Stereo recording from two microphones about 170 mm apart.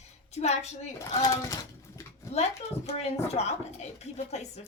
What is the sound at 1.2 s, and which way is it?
Speech, 20° left (ahead or behind).